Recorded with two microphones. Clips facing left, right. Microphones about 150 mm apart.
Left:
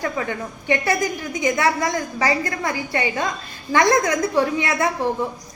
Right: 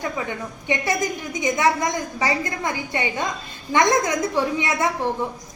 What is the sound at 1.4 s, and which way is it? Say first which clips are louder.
A woman's voice: even; 20° right (ahead or behind).